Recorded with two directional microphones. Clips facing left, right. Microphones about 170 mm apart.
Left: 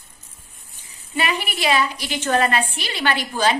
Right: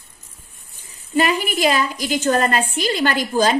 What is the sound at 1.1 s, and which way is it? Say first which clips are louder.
A woman's voice: right 6 dB; 40° right (ahead or behind).